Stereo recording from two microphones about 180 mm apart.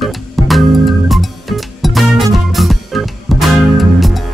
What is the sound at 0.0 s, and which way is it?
Music, centre (ahead or behind).